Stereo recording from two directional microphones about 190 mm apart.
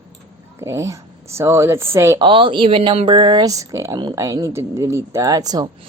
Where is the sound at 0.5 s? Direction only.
15° right (ahead or behind).